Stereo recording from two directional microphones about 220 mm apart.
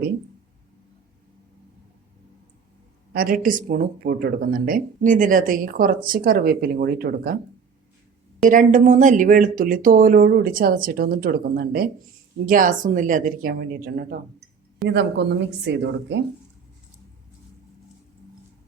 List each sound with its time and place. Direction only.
3.1 s speech: 40° right (ahead or behind)
8.4 s a woman's voice: 35° right (ahead or behind); by 16.2 s 50° right (ahead or behind)